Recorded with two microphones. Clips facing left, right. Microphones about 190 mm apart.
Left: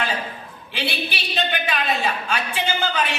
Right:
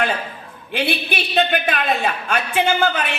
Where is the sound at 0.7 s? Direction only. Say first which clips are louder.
Right 5 dB; 55° right (ahead or behind).